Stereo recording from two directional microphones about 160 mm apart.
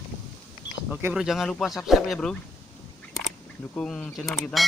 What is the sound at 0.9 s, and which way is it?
Speech, 5° right (ahead or behind).